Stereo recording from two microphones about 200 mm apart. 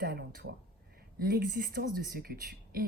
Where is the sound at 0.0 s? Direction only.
45° right (ahead or behind).